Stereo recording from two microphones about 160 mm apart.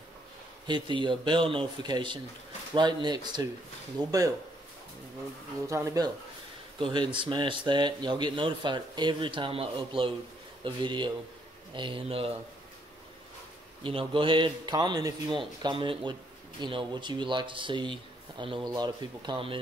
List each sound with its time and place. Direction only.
0.7 s speech: 30° right (ahead or behind)
5.7 s speech: 20° right (ahead or behind); by 12.3 s 35° right (ahead or behind)
13.8 s speech: 35° right (ahead or behind)